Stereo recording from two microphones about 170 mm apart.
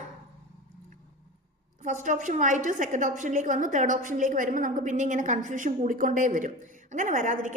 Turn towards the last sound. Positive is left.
turn(degrees=-45)  # may be behind; listen again after turning